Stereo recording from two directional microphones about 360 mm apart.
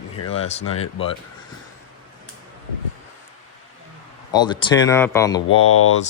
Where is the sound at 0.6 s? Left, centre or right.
Left.